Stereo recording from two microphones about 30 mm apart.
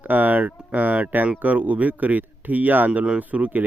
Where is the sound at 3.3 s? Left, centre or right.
Right.